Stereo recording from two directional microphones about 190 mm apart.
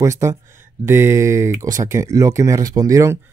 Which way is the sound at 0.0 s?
15° right (ahead or behind).